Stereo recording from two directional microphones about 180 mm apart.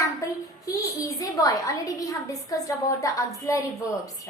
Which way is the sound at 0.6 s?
20° left (ahead or behind).